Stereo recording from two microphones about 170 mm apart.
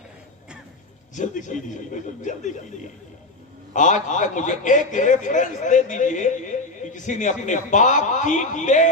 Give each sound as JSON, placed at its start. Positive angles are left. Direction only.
{"t": 1.1, "sound": "a man's voice", "side_deg": 45}
{"t": 3.7, "sound": "a man's voice", "side_deg": 45}